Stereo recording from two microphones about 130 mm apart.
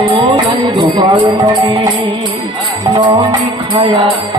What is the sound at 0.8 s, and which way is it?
Music, 35° right (ahead or behind).